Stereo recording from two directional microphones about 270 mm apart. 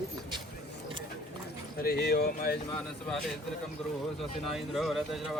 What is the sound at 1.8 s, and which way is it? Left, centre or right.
Speech, left.